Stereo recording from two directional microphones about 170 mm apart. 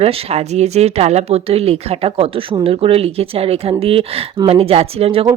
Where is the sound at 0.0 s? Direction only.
35° right (ahead or behind).